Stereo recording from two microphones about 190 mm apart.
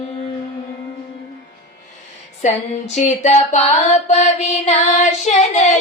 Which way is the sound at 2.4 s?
40° left (ahead or behind).